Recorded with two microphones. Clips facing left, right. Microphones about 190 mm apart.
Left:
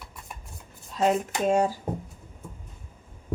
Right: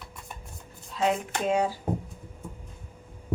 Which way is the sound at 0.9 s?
45° left (ahead or behind).